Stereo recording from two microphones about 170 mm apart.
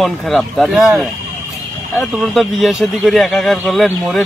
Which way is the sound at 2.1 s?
Centre (ahead or behind).